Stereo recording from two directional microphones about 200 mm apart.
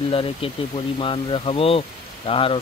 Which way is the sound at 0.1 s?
25° left (ahead or behind).